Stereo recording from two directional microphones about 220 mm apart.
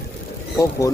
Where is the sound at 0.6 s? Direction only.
15° left (ahead or behind).